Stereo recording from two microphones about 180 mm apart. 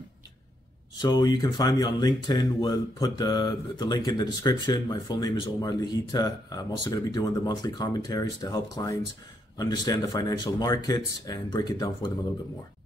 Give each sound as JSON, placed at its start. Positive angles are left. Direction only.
{"t": 1.0, "sound": "speech", "side_deg": 25}